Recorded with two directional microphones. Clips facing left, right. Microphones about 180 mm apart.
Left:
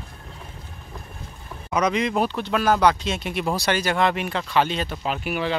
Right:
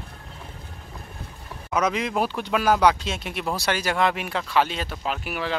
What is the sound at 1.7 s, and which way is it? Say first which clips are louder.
Speech: left 2 dB; 5° right (ahead or behind).